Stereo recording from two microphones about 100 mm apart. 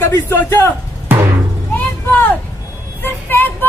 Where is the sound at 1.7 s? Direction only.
20° left (ahead or behind).